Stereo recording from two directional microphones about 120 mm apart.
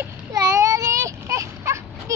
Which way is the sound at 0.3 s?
30° right (ahead or behind).